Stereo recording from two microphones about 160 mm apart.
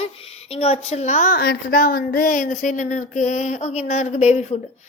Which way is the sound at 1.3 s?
70° left (ahead or behind).